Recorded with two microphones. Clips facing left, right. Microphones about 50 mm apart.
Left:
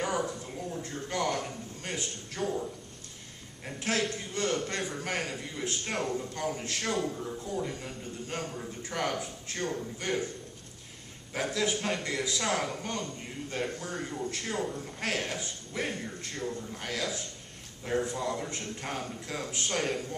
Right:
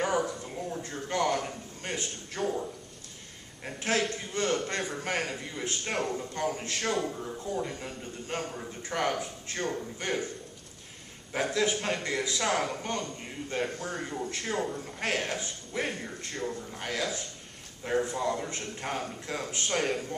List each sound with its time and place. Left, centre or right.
0.0 s a sound: centre
3.6 s a man's voice: centre
11.3 s a man's voice: centre